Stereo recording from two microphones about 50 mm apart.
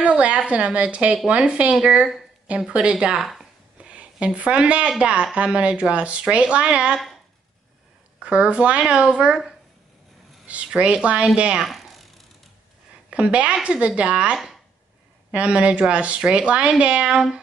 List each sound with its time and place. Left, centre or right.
0.0 s a sound: right
0.5 s speech: right
3.2 s speech: centre
3.8 s speech: right
8.2 s speech: right
10.4 s speech: right
11.6 s a sound: centre
13.1 s speech: right